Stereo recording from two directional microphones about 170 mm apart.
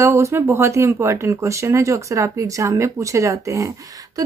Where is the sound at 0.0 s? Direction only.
15° right (ahead or behind).